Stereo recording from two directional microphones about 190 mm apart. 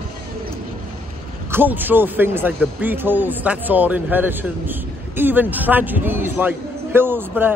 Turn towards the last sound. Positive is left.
turn(degrees=-10)  # may be behind; listen again after turning